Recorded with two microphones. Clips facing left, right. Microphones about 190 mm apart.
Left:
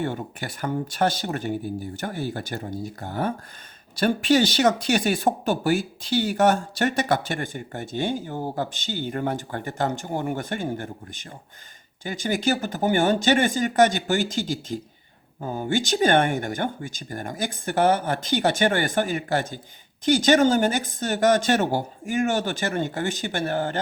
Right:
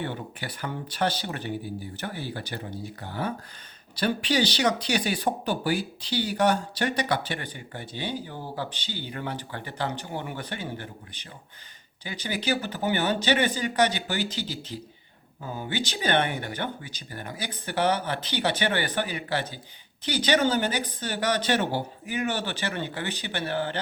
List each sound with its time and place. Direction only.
0.0 s speech: 45° left (ahead or behind)